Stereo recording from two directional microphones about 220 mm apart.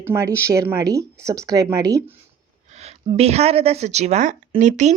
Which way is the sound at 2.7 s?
30° right (ahead or behind).